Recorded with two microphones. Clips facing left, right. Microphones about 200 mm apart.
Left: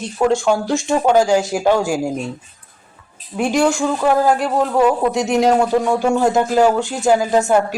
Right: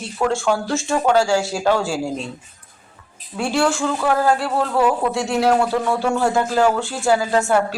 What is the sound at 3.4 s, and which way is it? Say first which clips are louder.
A man's voice: left 3 dB; 15° left (ahead or behind).